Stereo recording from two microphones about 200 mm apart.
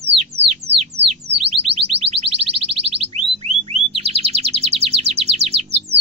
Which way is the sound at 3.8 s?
30° right (ahead or behind).